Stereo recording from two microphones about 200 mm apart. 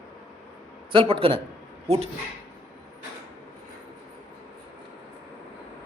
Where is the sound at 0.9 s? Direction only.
25° right (ahead or behind).